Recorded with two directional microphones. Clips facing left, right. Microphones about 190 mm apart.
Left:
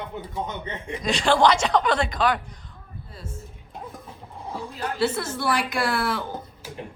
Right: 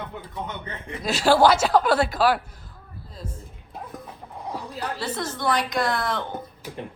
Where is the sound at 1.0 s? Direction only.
5° right (ahead or behind).